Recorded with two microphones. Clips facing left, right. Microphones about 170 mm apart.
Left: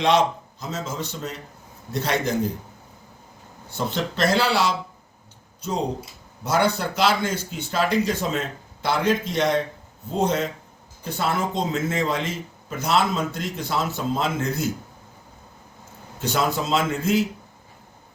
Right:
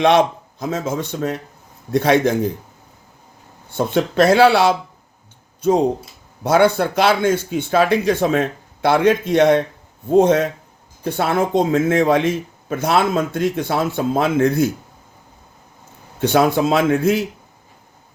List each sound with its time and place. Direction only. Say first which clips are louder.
0.0 s speech: right 5 dB; 55° right (ahead or behind)
3.8 s speech: right 8 dB; 50° right (ahead or behind)
6.4 s speech: right 7 dB; 60° right (ahead or behind)
16.2 s speech: right 9 dB; 60° right (ahead or behind)